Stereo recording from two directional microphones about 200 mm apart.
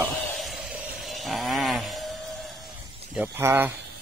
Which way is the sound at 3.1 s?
10° right (ahead or behind).